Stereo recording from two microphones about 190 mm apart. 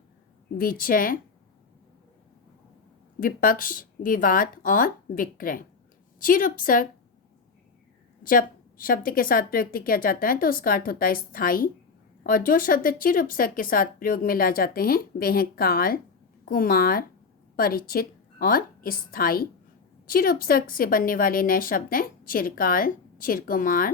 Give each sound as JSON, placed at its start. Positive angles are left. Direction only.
{"t": 0.6, "sound": "a woman's voice", "side_deg": 50}
{"t": 3.2, "sound": "a woman's voice", "side_deg": 45}
{"t": 8.2, "sound": "a woman's voice", "side_deg": 50}